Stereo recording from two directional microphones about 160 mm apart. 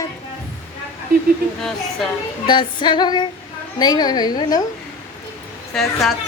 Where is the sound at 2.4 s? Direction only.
30° left (ahead or behind).